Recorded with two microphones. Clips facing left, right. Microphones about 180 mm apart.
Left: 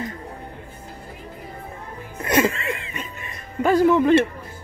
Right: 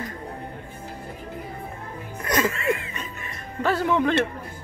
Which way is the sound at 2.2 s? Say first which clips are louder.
Left 4 dB; 25° left (ahead or behind).